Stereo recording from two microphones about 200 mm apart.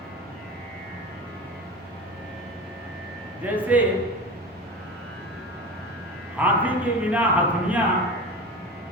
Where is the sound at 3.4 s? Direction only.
10° right (ahead or behind).